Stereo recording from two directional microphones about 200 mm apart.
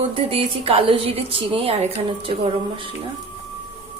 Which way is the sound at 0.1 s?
30° right (ahead or behind).